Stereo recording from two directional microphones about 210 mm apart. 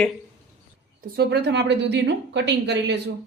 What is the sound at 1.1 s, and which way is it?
A woman's voice, 50° right (ahead or behind).